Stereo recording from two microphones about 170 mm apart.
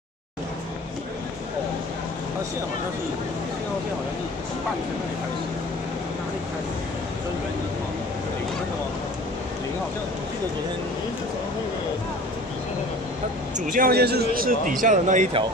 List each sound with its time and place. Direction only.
13.7 s speech: 55° right (ahead or behind)